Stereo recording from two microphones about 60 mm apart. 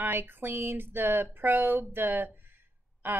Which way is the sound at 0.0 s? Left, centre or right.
Right.